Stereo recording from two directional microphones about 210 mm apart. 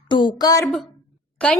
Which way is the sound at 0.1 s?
20° left (ahead or behind).